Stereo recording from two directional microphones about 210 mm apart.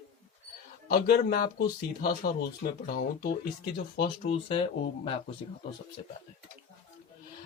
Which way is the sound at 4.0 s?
25° left (ahead or behind).